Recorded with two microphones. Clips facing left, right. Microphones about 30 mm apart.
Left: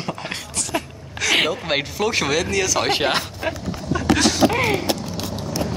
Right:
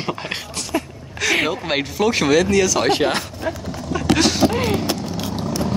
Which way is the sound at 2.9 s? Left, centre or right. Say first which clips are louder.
Right 1 dB; left.